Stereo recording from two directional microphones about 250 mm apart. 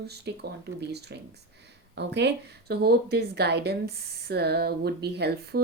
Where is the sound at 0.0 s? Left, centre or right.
Right.